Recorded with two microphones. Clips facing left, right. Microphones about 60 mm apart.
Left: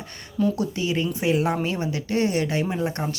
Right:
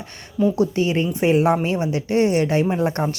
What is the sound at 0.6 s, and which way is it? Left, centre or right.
Speech, right.